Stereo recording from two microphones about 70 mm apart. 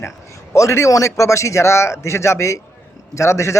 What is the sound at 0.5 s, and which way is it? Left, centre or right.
A man's voice, left.